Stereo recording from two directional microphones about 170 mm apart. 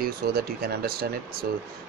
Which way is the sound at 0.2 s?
65° right (ahead or behind).